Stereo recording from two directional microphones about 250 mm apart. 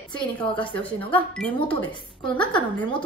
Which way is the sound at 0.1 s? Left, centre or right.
Centre.